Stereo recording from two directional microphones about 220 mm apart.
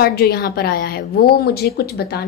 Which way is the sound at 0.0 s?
45° left (ahead or behind).